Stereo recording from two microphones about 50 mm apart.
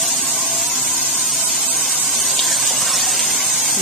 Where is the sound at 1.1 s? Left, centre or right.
Centre.